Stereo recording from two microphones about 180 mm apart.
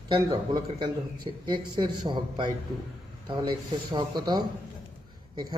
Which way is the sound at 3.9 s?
25° right (ahead or behind).